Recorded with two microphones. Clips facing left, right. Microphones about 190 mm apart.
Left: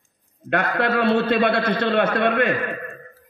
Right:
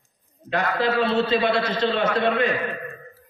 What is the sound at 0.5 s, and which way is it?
A man's voice, 60° left (ahead or behind).